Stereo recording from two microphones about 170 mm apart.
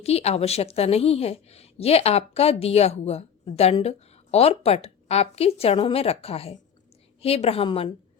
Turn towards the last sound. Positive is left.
turn(degrees=30)  # may be behind; listen again after turning